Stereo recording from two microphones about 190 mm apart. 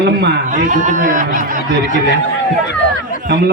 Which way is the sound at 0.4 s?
40° right (ahead or behind).